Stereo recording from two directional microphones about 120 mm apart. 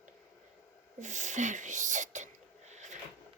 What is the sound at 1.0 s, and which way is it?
Whispering, 90° right.